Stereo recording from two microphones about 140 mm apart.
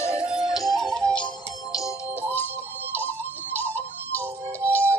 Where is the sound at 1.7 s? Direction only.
25° left (ahead or behind).